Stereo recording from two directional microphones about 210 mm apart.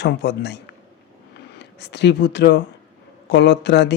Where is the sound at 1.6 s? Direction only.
55° left (ahead or behind).